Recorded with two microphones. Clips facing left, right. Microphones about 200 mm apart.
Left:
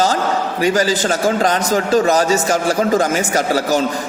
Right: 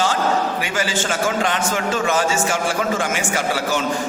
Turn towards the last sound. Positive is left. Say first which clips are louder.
# left 5 dB
turn(degrees=40)  # may be behind; listen again after turning